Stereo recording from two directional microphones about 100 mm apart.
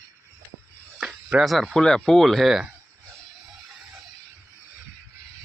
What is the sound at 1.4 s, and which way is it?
Speech, centre (ahead or behind).